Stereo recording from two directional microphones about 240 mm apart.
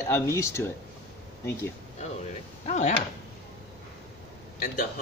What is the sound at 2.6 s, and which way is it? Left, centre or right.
Speech, left.